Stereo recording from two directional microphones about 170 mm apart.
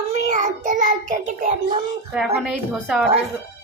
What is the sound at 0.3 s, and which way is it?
A child's voice, 50° right (ahead or behind).